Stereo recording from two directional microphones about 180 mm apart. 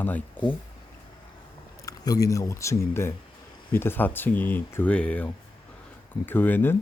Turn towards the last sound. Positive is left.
turn(degrees=10)  # may be behind; listen again after turning